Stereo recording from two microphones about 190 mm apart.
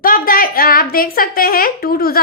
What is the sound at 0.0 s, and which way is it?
A woman's voice, 50° left (ahead or behind).